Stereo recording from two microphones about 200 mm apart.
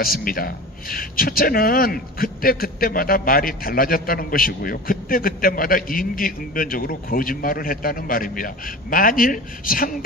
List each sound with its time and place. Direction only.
0.0 s a man's voice: 45° left (ahead or behind)